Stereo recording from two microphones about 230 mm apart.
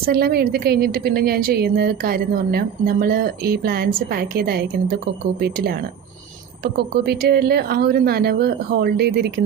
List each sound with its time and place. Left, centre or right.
0.0 s a woman's voice: right
6.7 s a woman's voice: right